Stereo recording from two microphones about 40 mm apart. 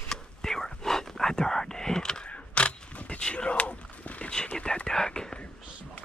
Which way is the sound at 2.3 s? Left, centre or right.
Left.